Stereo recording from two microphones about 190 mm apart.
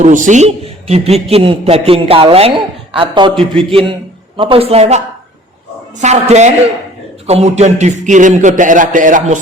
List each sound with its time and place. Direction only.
0.0 s a man's voice: 40° right (ahead or behind)